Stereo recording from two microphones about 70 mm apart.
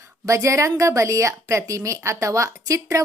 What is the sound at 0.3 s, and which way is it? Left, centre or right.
A woman's voice, right.